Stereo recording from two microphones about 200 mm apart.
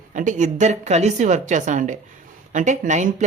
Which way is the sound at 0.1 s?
40° right (ahead or behind).